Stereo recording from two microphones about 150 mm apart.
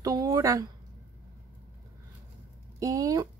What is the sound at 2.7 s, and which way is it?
Speech, 20° right (ahead or behind).